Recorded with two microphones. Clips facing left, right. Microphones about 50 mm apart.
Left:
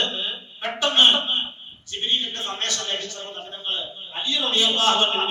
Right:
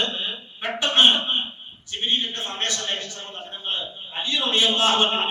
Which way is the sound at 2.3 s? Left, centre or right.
Right.